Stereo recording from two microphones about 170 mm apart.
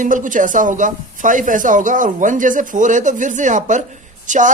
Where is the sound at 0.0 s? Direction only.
50° right (ahead or behind).